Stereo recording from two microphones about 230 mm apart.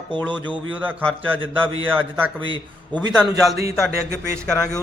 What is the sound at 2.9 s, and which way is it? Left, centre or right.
Speech, centre.